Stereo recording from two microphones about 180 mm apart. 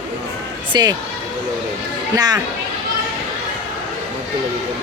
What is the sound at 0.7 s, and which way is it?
Speech, 25° right (ahead or behind).